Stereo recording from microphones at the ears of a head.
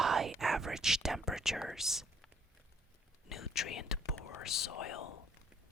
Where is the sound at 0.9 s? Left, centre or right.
Centre.